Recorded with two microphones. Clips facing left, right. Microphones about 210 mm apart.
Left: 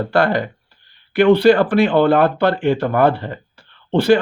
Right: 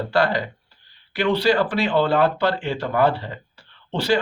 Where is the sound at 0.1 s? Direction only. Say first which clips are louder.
Left 3 dB; 55° left (ahead or behind).